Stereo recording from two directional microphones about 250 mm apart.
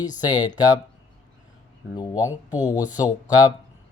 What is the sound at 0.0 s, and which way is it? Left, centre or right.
Speech, centre.